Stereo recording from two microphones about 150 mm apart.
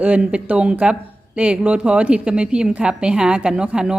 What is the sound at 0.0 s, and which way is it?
A woman's voice, 10° right (ahead or behind).